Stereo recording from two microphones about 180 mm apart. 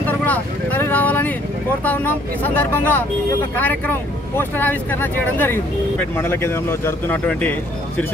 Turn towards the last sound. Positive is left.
turn(degrees=10)  # may be behind; listen again after turning